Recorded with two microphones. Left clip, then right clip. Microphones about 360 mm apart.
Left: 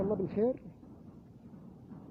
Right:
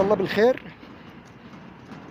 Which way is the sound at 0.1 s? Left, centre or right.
Left.